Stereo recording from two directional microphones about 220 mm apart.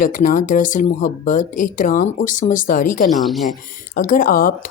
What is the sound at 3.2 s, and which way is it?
Speech, centre (ahead or behind).